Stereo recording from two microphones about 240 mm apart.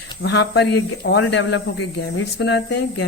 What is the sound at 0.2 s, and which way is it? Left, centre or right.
A man's voice, left.